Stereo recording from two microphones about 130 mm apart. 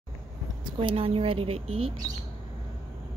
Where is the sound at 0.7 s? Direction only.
45° right (ahead or behind).